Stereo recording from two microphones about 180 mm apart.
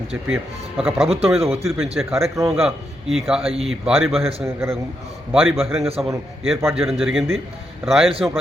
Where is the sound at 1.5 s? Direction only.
35° right (ahead or behind).